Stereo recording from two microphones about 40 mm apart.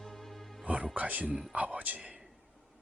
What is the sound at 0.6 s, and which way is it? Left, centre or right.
Speech, right.